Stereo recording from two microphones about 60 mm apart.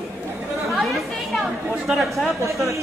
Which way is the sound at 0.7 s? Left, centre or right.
Centre.